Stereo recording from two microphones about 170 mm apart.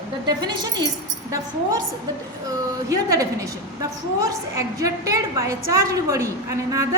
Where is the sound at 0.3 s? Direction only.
25° right (ahead or behind).